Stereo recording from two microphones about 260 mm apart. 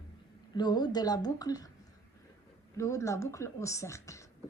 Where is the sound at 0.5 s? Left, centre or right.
Centre.